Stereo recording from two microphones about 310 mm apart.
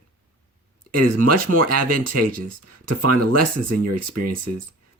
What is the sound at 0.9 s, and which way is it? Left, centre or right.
Speech, right.